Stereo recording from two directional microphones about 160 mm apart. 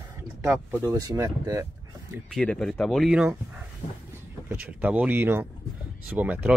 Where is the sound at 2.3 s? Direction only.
5° left (ahead or behind).